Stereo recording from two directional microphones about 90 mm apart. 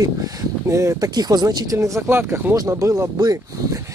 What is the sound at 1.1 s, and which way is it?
Speech, 50° right (ahead or behind).